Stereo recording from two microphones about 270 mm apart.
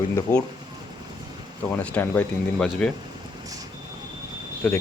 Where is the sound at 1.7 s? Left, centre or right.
Centre.